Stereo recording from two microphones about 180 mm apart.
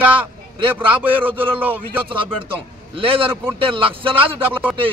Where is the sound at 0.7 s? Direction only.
10° right (ahead or behind).